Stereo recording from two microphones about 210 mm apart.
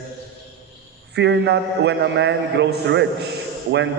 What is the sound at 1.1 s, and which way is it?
A man's voice, 55° right (ahead or behind).